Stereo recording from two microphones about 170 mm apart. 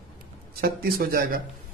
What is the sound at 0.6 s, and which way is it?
Speech, 60° right (ahead or behind).